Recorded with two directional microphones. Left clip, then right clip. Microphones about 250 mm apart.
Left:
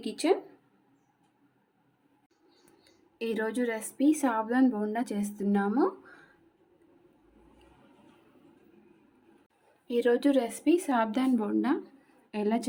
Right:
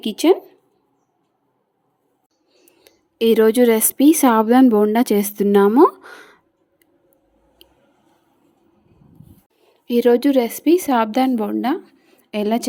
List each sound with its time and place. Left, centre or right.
0.0 s a woman's voice: right
2.8 s speech: right
9.8 s a woman's voice: right